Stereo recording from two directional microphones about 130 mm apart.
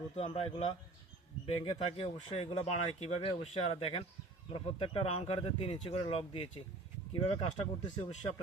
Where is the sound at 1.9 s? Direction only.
50° left (ahead or behind).